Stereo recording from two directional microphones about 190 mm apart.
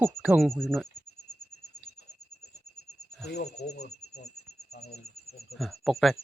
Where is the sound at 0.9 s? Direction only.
60° left (ahead or behind).